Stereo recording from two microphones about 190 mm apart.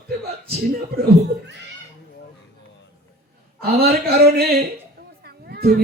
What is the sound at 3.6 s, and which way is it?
Speech, 55° right (ahead or behind).